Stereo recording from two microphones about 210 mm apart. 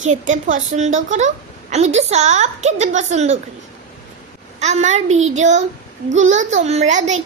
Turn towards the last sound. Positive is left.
turn(degrees=-35)  # may be behind; listen again after turning